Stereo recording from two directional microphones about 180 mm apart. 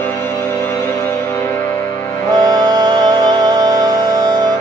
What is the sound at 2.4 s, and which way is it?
Music, 20° right (ahead or behind).